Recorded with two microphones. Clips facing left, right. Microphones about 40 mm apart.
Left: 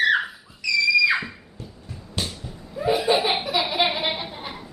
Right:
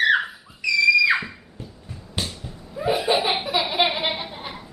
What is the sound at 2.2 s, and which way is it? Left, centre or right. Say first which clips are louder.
Laughter: even; centre.